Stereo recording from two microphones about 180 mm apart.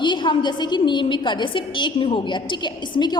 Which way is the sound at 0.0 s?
25° left (ahead or behind).